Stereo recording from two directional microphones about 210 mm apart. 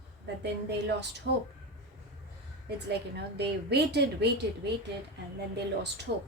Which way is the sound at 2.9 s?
50° right (ahead or behind).